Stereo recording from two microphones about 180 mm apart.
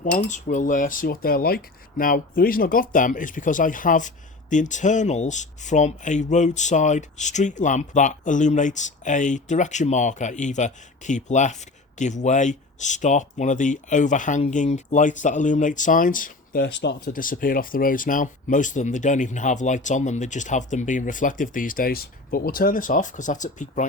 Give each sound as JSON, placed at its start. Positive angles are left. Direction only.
{"t": 0.0, "sound": "speech", "side_deg": 45}
{"t": 17.1, "sound": "speech", "side_deg": 50}